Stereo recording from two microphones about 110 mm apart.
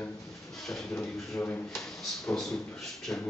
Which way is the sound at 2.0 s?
5° left (ahead or behind).